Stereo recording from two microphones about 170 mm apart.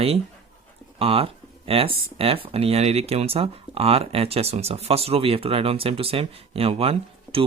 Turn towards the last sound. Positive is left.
turn(degrees=-35)  # may be behind; listen again after turning